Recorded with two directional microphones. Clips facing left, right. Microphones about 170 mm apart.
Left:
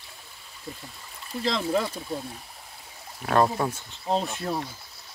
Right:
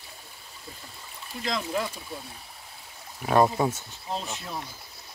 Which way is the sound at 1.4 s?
30° left (ahead or behind).